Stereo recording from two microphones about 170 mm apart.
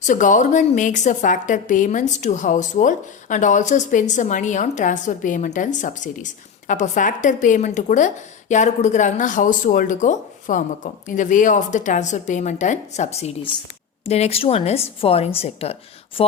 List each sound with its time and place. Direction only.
0.0 s a woman's voice: 50° left (ahead or behind)